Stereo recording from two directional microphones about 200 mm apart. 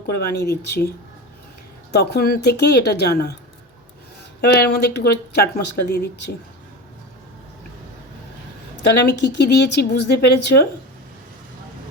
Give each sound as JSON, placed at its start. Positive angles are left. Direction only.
{"t": 0.1, "sound": "speech", "side_deg": 55}
{"t": 1.9, "sound": "speech", "side_deg": 55}
{"t": 4.4, "sound": "speech", "side_deg": 55}
{"t": 8.8, "sound": "speech", "side_deg": 55}